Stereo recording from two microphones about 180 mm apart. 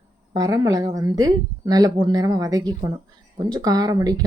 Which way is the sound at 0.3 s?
20° right (ahead or behind).